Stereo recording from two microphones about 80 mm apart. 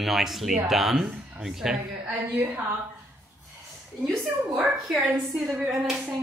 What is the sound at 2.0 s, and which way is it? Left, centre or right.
Speech, right.